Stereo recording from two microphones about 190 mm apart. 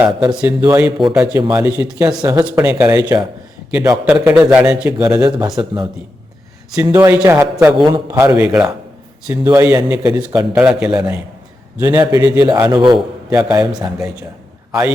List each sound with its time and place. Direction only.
0.3 s a man's voice: 20° right (ahead or behind)
7.7 s a man's voice: 25° right (ahead or behind)
10.5 s a man's voice: 5° right (ahead or behind)
11.8 s a man's voice: 15° right (ahead or behind)
14.7 s a man's voice: 10° right (ahead or behind)